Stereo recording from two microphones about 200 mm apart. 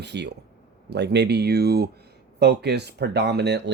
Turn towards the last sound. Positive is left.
turn(degrees=-60)  # may be behind; listen again after turning